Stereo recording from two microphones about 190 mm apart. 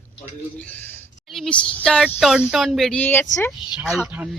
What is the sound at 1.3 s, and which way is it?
Speech, centre (ahead or behind).